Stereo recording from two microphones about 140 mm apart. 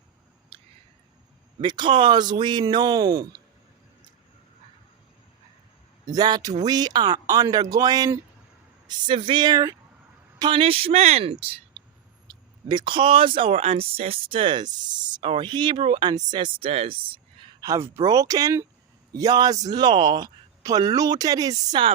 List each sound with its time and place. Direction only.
0.5 s a sound: 40° right (ahead or behind)
1.5 s speech: 35° right (ahead or behind)
6.1 s speech: 30° right (ahead or behind)
8.9 s speech: 35° right (ahead or behind)
12.3 s speech: 35° right (ahead or behind)
17.6 s speech: 20° right (ahead or behind)